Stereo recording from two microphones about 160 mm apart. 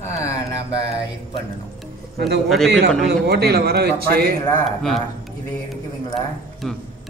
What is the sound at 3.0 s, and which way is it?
Speech, 90° right.